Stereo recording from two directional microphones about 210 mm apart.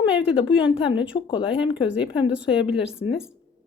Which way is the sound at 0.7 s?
25° left (ahead or behind).